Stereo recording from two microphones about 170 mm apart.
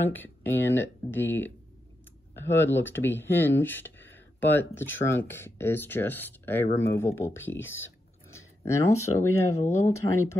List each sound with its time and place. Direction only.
0.1 s speech: 10° left (ahead or behind)